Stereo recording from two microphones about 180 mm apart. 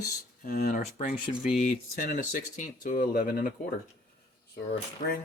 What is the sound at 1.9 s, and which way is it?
Speech, 55° left (ahead or behind).